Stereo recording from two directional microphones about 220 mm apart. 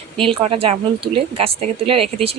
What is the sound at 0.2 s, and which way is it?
Speech, 25° right (ahead or behind).